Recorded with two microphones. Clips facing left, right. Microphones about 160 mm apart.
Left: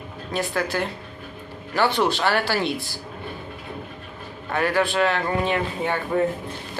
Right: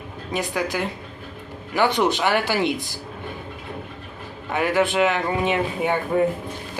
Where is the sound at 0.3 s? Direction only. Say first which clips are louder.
Even; 15° right (ahead or behind).